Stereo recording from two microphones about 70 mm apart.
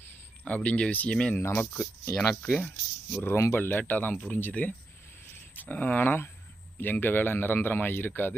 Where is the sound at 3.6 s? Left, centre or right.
Left.